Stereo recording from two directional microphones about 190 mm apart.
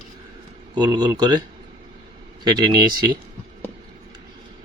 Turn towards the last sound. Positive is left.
turn(degrees=-20)  # may be behind; listen again after turning